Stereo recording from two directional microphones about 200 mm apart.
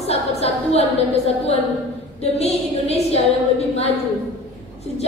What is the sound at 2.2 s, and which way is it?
Speech, 30° left (ahead or behind).